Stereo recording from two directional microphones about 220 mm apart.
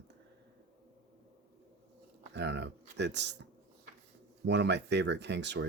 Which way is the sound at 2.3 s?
50° right (ahead or behind).